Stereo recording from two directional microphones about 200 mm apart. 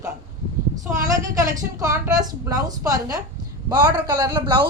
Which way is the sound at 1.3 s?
15° right (ahead or behind).